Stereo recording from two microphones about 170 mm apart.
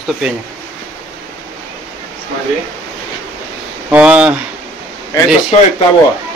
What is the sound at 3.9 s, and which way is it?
Speech, 5° right (ahead or behind).